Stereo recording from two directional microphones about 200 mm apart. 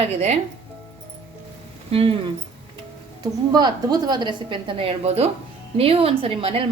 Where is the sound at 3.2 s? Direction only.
20° right (ahead or behind).